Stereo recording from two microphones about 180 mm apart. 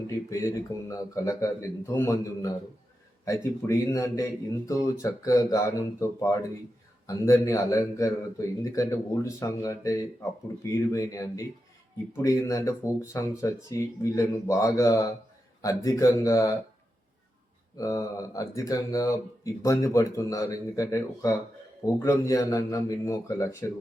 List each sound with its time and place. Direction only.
0.3 s speech: 15° left (ahead or behind)
17.7 s speech: 20° left (ahead or behind)